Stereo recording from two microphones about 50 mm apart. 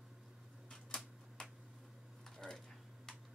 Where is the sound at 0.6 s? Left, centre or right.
Centre.